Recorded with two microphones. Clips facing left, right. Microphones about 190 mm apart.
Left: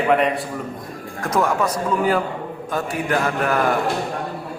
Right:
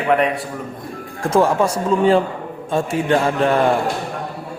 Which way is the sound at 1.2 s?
30° right (ahead or behind).